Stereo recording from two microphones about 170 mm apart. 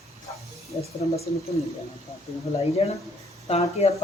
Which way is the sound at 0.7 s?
30° left (ahead or behind).